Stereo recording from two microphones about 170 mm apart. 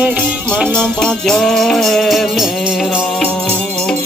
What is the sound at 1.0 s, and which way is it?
Music, 5° left (ahead or behind).